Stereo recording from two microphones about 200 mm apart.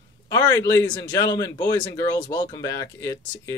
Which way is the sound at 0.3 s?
15° left (ahead or behind).